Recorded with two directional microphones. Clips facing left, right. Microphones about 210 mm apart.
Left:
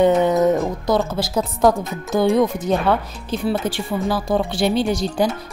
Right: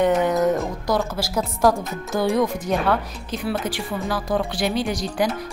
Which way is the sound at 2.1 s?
20° left (ahead or behind).